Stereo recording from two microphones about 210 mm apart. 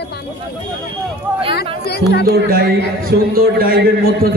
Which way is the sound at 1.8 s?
50° left (ahead or behind).